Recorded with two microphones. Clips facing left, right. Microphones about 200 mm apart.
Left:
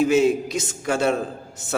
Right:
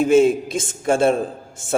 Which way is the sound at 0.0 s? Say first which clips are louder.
Right 3 dB; 50° right (ahead or behind).